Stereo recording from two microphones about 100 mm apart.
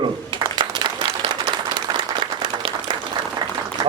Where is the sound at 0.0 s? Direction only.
50° right (ahead or behind).